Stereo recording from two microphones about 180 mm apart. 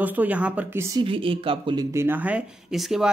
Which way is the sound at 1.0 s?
30° right (ahead or behind).